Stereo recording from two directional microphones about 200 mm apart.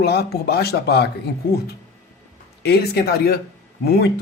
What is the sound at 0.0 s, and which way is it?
Speech, 55° left (ahead or behind).